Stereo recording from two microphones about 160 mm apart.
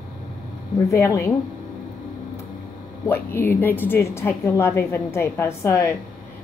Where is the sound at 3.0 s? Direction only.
15° left (ahead or behind).